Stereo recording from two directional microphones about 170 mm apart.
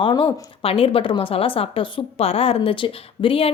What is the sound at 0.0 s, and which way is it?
Speech, 25° left (ahead or behind).